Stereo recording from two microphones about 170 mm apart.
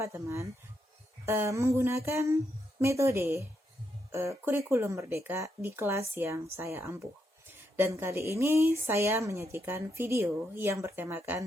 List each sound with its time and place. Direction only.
0.0 s speech: 15° right (ahead or behind)